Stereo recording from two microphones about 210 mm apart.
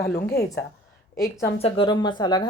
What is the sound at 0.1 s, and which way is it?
Speech, 50° left (ahead or behind).